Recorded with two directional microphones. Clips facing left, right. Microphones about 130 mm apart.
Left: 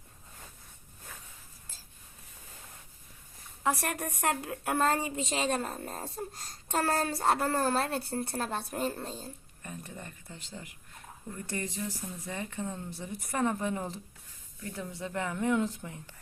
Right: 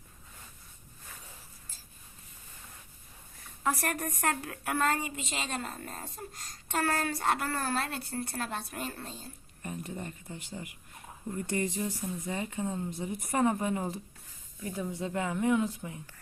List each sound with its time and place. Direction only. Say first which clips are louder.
3.6 s a woman's voice: even; 15° left (ahead or behind)
4.9 s a woman's voice: left 2 dB; 40° left (ahead or behind)
9.6 s speech: right 5 dB; 20° right (ahead or behind)